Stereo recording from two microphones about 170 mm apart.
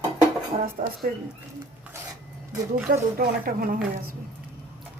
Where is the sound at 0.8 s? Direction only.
55° right (ahead or behind).